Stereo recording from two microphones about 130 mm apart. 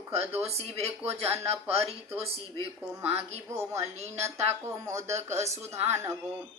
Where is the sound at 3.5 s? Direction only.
20° right (ahead or behind).